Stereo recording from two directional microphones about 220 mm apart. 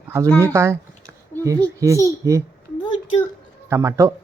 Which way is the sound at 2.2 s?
15° right (ahead or behind).